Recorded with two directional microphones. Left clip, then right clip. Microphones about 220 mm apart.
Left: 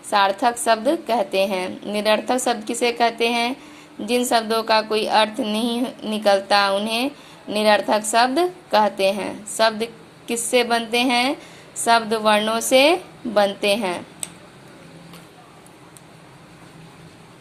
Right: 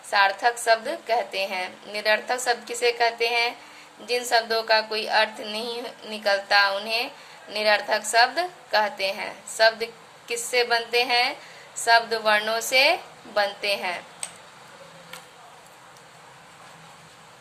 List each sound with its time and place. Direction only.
0.1 s a woman's voice: 20° left (ahead or behind)